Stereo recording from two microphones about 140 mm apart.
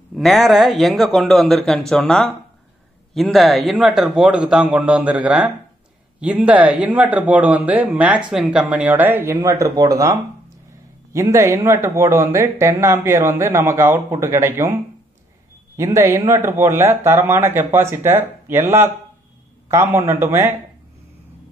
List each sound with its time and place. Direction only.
0.1 s a man's voice: centre (ahead or behind); by 10.1 s 25° right (ahead or behind)
11.1 s speech: 20° right (ahead or behind)